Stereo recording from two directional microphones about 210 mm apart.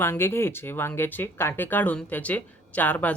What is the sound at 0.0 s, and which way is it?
Speech, 10° left (ahead or behind).